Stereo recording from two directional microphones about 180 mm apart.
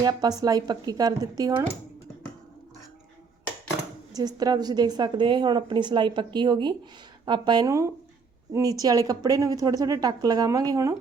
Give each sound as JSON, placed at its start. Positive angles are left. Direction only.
{"t": 0.0, "sound": "a woman's voice", "side_deg": -20}
{"t": 4.1, "sound": "a woman's voice", "side_deg": -20}